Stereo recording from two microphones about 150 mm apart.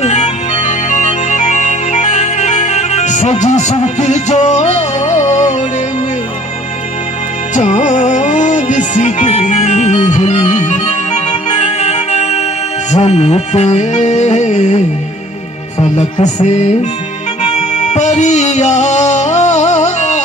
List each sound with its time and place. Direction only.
0.0 s music: 50° left (ahead or behind)
7.5 s music: 55° left (ahead or behind)
15.8 s music: 50° left (ahead or behind)